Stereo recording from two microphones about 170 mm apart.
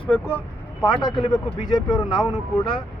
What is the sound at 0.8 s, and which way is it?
Speech, 25° left (ahead or behind).